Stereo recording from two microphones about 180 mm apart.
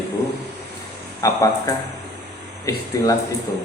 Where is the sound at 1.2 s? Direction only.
20° left (ahead or behind).